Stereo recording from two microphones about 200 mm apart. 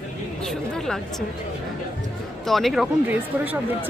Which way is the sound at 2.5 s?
Centre (ahead or behind).